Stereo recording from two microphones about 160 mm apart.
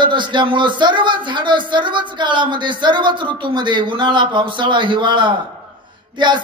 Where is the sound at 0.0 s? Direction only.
30° right (ahead or behind).